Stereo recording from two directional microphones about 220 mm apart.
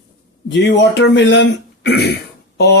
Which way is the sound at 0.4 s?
55° left (ahead or behind).